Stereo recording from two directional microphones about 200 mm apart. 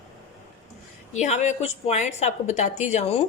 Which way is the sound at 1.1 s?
35° left (ahead or behind).